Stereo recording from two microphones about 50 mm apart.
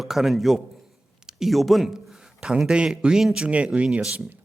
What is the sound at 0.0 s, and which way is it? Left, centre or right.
A man's voice, centre.